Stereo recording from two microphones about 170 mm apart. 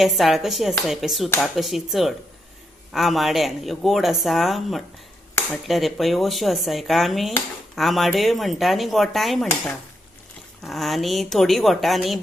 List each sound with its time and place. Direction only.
0.0 s speech: centre (ahead or behind)
10.6 s speech: centre (ahead or behind)